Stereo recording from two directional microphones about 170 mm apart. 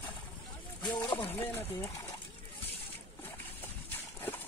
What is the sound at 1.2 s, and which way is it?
Speech, 10° left (ahead or behind).